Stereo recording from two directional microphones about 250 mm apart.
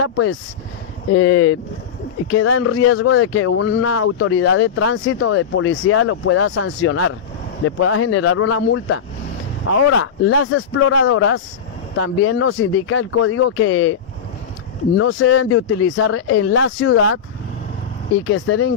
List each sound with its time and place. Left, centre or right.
0.0 s speech: left
15.0 s speech: left
18.2 s speech: left